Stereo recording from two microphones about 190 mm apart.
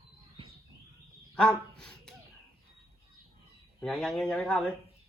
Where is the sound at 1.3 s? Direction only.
5° left (ahead or behind).